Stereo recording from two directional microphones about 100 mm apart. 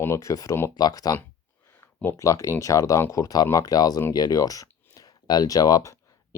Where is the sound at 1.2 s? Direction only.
25° left (ahead or behind).